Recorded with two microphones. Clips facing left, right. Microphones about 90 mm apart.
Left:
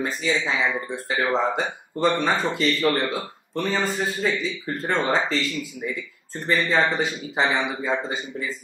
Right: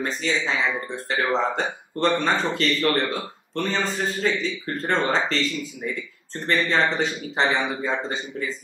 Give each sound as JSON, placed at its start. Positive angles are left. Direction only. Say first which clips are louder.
{"t": 0.0, "sound": "speech", "louder": "left 1 dB", "side_deg": 5}